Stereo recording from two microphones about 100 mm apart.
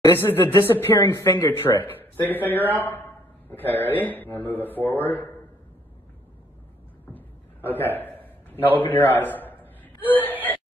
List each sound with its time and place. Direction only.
0.1 s a man's voice: 20° left (ahead or behind)
7.1 s a sound: 20° left (ahead or behind)
8.7 s a man's voice: 20° left (ahead or behind)